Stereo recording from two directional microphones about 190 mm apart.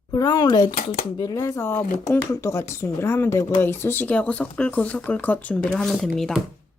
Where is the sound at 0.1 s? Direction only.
25° left (ahead or behind).